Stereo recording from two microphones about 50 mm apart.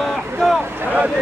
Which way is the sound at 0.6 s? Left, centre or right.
Right.